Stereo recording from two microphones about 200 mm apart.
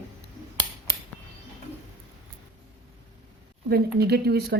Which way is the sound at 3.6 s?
55° right (ahead or behind).